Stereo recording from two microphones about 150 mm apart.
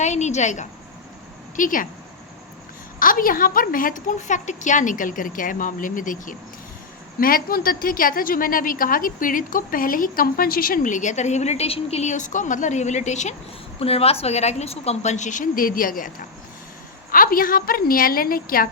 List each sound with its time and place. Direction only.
0.0 s a woman's voice: 50° left (ahead or behind)
1.5 s a woman's voice: 60° left (ahead or behind)
3.0 s a woman's voice: 70° left (ahead or behind)